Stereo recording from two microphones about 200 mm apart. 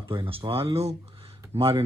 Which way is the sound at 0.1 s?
25° right (ahead or behind).